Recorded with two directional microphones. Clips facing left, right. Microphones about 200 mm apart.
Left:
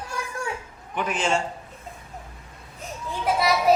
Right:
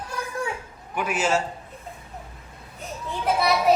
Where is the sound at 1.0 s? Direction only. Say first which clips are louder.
Right 1 dB; 10° right (ahead or behind).